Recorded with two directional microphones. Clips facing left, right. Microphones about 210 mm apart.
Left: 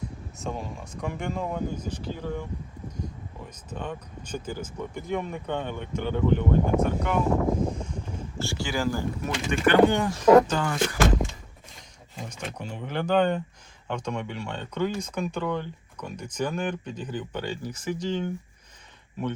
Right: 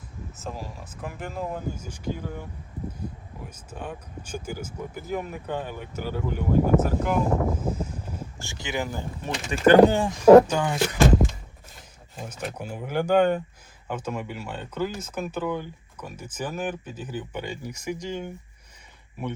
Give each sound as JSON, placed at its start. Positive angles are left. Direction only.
{"t": 0.0, "sound": "speech", "side_deg": 0}
{"t": 7.7, "sound": "a sound", "side_deg": -5}
{"t": 8.4, "sound": "speech", "side_deg": -20}
{"t": 9.5, "sound": "speech", "side_deg": -40}
{"t": 10.0, "sound": "speech", "side_deg": -30}
{"t": 10.5, "sound": "speech", "side_deg": -15}
{"t": 12.3, "sound": "speech", "side_deg": -5}